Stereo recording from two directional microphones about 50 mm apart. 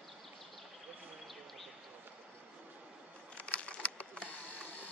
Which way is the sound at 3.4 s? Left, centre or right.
Left.